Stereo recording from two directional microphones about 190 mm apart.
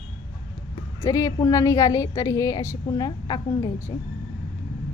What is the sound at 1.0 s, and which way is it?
A woman's voice, 20° left (ahead or behind).